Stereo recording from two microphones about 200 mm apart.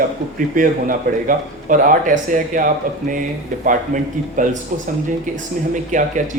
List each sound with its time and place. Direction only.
0.3 s a man's voice: 45° right (ahead or behind)
5.9 s a man's voice: 40° right (ahead or behind)